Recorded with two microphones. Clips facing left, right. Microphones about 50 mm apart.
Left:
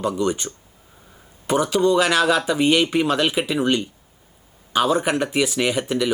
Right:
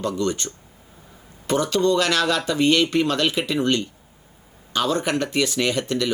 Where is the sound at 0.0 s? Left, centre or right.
Centre.